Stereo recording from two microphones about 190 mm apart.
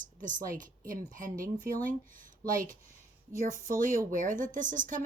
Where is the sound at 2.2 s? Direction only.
45° right (ahead or behind).